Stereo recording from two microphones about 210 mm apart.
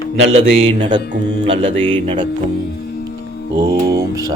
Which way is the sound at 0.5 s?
25° right (ahead or behind).